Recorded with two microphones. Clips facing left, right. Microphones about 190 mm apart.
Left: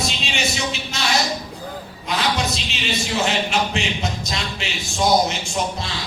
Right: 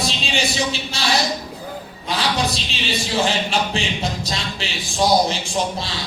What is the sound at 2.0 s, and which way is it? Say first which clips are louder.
A man's voice: right 1 dB; 30° right (ahead or behind).